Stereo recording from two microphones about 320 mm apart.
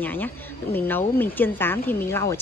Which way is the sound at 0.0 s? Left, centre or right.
Centre.